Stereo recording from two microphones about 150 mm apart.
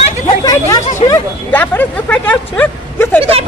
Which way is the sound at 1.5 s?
10° left (ahead or behind).